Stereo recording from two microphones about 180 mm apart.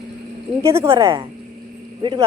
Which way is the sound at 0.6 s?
15° right (ahead or behind).